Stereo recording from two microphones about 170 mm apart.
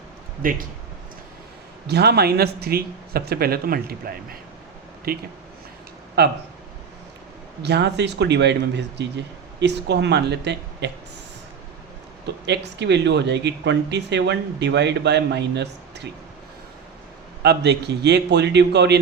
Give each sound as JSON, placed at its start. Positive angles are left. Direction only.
{"t": 0.4, "sound": "speech", "side_deg": -55}
{"t": 1.9, "sound": "speech", "side_deg": -70}
{"t": 7.6, "sound": "speech", "side_deg": -80}
{"t": 12.5, "sound": "speech", "side_deg": -90}
{"t": 17.4, "sound": "speech", "side_deg": -75}